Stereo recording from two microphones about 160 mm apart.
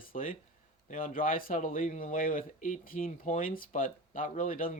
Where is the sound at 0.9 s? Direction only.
55° left (ahead or behind).